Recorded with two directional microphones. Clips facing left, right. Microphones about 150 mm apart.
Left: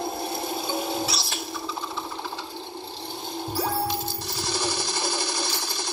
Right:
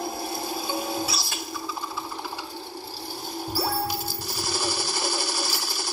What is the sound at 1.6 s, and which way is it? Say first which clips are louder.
Jackhammer: even; 25° left (ahead or behind).